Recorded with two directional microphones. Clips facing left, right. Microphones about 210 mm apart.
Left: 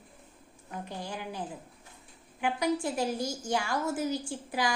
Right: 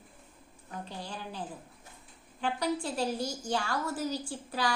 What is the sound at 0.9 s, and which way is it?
Speech, 15° left (ahead or behind).